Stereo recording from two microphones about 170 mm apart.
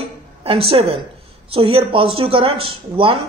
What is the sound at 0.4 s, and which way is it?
A woman's voice, 35° right (ahead or behind).